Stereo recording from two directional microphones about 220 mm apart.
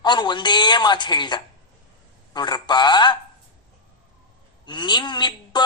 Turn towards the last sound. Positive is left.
turn(degrees=20)  # may be behind; listen again after turning